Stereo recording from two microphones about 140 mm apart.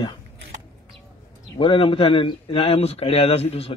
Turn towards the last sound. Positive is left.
turn(degrees=45)  # may be behind; listen again after turning